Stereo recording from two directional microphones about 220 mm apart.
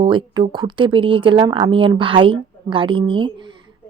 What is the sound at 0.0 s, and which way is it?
Speech, 25° right (ahead or behind).